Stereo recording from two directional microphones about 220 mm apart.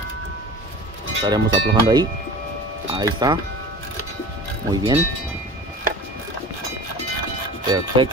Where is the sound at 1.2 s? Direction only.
20° right (ahead or behind).